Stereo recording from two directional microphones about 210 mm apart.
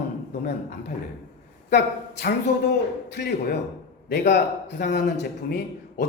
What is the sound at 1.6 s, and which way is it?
A woman's voice, 50° left (ahead or behind).